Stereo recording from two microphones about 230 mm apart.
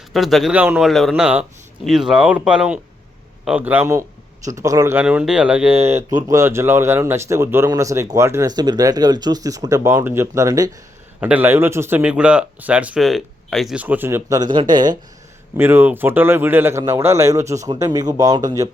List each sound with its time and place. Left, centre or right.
0.1 s a man's voice: centre
5.7 s speech: right
6.2 s speech: centre